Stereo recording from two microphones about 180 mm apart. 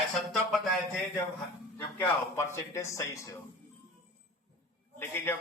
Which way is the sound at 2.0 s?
15° left (ahead or behind).